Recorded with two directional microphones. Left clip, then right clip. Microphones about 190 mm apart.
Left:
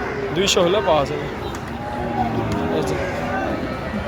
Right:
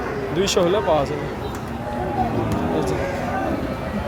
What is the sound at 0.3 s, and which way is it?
Speech, 10° right (ahead or behind).